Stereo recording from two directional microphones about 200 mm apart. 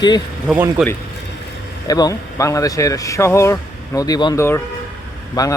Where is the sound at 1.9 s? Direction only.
15° left (ahead or behind).